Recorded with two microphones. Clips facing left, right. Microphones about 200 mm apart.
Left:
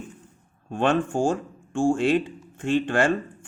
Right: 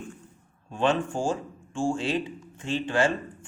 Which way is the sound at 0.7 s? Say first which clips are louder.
Left 3 dB; 55° left (ahead or behind).